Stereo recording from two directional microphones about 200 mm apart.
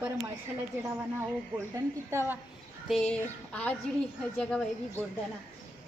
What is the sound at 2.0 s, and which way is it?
Speech, 15° right (ahead or behind).